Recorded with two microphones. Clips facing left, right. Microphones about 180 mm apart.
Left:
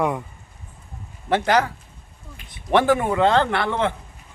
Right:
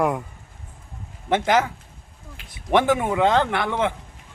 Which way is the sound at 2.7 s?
15° right (ahead or behind).